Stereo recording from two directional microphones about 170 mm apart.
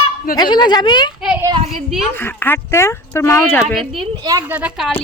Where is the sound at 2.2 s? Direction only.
10° left (ahead or behind).